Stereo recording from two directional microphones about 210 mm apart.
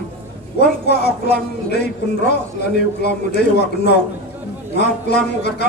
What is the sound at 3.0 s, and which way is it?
A man's voice, 50° left (ahead or behind).